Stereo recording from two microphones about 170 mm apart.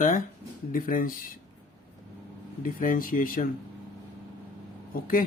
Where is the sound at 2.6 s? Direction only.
55° left (ahead or behind).